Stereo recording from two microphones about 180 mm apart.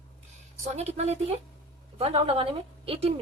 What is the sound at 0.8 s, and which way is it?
Speech, 35° right (ahead or behind).